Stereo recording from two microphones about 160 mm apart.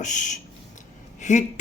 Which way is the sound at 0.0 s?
50° left (ahead or behind).